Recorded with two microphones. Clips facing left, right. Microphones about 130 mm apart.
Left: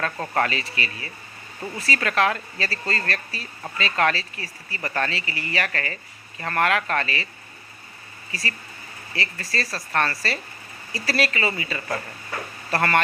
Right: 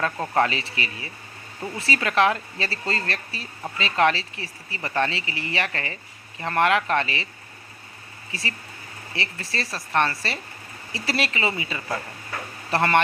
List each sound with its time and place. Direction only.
0.0 s speech: 20° right (ahead or behind)
8.3 s speech: 20° right (ahead or behind)